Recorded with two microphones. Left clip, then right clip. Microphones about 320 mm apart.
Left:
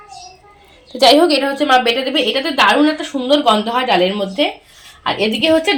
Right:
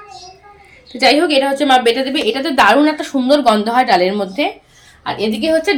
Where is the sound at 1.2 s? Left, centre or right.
Left.